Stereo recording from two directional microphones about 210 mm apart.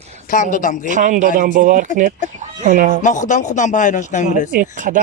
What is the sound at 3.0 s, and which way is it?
Speech, 35° left (ahead or behind).